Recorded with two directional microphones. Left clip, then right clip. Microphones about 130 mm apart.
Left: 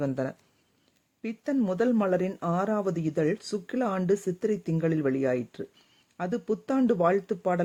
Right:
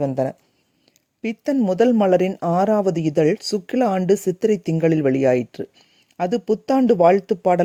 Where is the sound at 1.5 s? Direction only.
50° right (ahead or behind).